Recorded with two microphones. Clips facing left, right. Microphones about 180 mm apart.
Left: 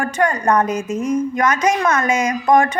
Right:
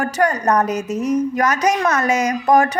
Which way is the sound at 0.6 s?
70° right (ahead or behind).